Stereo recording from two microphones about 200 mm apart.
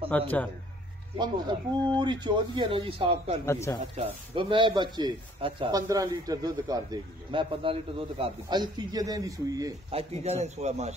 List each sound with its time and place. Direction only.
0.1 s speech: 5° left (ahead or behind)
1.1 s a man's voice: 20° right (ahead or behind)
3.4 s speech: 15° left (ahead or behind)
3.9 s a man's voice: 25° right (ahead or behind)
9.8 s a man's voice: 30° right (ahead or behind)